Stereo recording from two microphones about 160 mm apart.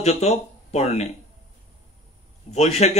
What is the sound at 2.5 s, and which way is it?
Speech, 45° left (ahead or behind).